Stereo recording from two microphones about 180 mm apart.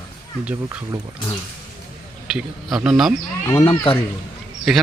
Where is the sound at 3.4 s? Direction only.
15° left (ahead or behind).